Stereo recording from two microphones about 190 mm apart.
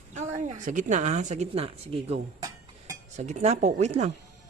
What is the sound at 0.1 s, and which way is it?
A woman's voice, 40° right (ahead or behind).